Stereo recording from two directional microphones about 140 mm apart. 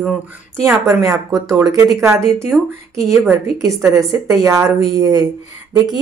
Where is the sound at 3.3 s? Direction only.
20° right (ahead or behind).